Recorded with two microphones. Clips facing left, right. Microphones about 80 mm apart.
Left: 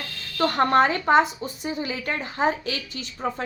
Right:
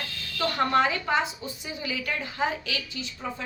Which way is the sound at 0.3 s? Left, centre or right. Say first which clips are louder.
Left 5 dB; left.